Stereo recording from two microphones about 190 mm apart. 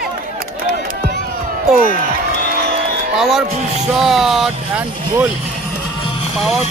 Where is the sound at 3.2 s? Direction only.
Centre (ahead or behind).